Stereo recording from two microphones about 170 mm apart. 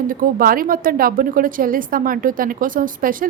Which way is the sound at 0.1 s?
55° right (ahead or behind).